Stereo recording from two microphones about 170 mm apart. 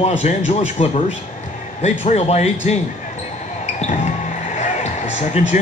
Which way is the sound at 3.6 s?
40° left (ahead or behind).